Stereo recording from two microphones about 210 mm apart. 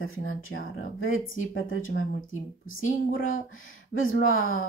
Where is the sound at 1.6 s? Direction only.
70° left (ahead or behind).